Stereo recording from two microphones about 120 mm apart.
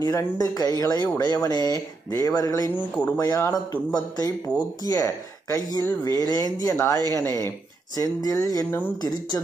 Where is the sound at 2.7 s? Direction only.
15° left (ahead or behind).